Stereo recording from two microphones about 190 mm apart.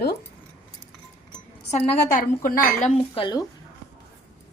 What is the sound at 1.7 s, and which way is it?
Speech, 35° left (ahead or behind).